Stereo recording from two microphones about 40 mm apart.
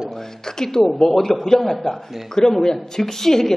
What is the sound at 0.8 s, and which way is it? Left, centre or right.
A man's voice, centre.